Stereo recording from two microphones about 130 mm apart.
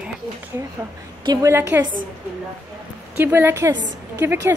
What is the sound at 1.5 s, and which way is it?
Speech, 20° right (ahead or behind).